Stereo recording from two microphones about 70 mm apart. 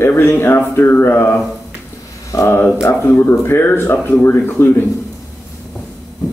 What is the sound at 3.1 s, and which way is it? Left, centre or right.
Speech, left.